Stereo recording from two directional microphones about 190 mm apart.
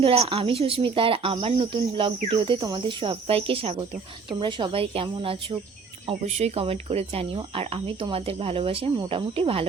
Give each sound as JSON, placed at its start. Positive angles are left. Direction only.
{"t": 0.0, "sound": "speech", "side_deg": -30}